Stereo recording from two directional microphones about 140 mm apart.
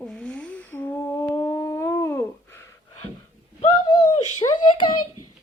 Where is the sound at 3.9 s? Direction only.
30° left (ahead or behind).